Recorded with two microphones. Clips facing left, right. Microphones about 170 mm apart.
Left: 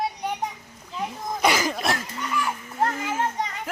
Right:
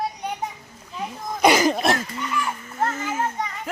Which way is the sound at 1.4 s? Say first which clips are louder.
Right 6 dB; 20° right (ahead or behind).